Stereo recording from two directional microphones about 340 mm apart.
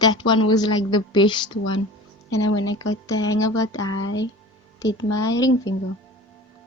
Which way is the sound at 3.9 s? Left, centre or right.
Left.